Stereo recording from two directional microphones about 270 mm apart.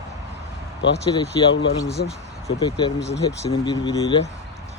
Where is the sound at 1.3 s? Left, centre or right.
Centre.